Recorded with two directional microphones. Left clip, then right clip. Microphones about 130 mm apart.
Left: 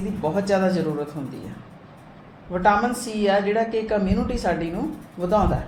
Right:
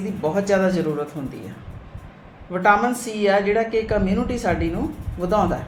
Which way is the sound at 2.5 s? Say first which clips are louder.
Right 2 dB; 25° right (ahead or behind).